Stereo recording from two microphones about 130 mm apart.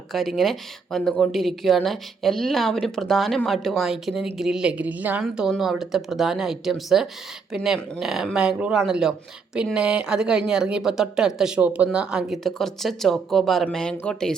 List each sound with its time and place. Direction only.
0.1 s a woman's voice: centre (ahead or behind)